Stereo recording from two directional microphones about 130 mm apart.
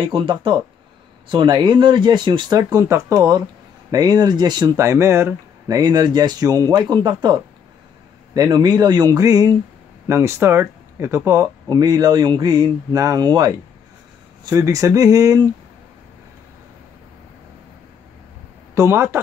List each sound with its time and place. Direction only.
0.1 s speech: 40° right (ahead or behind)
4.7 s speech: 20° right (ahead or behind)
8.4 s speech: 35° right (ahead or behind)
14.5 s speech: 25° right (ahead or behind)
18.8 s speech: 20° right (ahead or behind)